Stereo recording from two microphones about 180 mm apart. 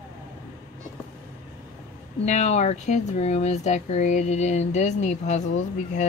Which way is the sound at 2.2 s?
40° left (ahead or behind).